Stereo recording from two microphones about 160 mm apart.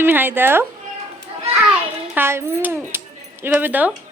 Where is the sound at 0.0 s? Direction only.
15° right (ahead or behind).